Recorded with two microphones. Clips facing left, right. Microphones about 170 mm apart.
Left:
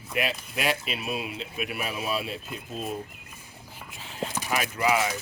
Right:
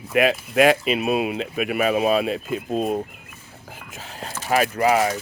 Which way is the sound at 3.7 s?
45° right (ahead or behind).